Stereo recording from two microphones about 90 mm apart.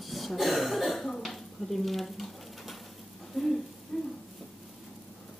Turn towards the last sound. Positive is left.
turn(degrees=5)  # may be behind; listen again after turning